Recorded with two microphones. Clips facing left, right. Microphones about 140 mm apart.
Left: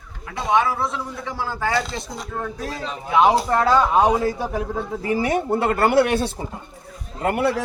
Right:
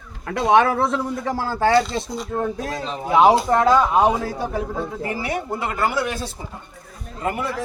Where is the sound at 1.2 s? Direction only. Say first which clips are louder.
Right 4 dB; 40° right (ahead or behind).